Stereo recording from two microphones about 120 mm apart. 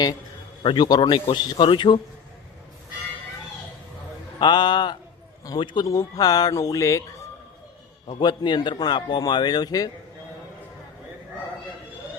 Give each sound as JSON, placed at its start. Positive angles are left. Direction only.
{"t": 0.6, "sound": "a man's voice", "side_deg": 40}
{"t": 4.4, "sound": "a man's voice", "side_deg": 40}
{"t": 8.2, "sound": "a man's voice", "side_deg": 40}